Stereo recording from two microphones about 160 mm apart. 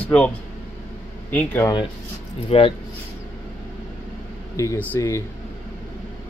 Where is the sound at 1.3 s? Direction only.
10° left (ahead or behind).